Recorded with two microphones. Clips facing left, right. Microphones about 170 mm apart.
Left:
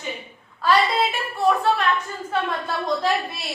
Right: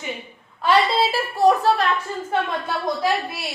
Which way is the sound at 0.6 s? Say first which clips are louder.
Right 1 dB; 30° right (ahead or behind).